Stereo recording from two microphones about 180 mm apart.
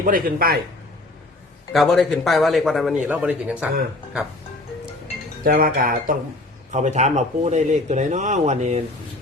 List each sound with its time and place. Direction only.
0.0 s speech: 50° right (ahead or behind)
1.7 s a man's voice: centre (ahead or behind)
5.5 s speech: 55° right (ahead or behind)
6.7 s speech: 40° right (ahead or behind)